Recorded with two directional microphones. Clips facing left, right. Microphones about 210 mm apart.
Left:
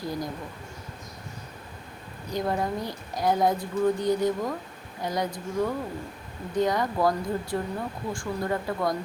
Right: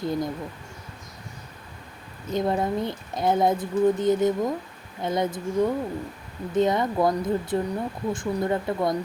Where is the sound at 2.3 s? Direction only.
25° right (ahead or behind).